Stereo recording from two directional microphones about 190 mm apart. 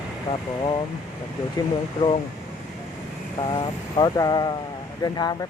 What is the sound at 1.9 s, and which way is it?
Speech, 25° left (ahead or behind).